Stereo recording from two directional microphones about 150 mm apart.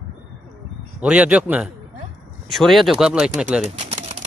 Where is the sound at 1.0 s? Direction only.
5° right (ahead or behind).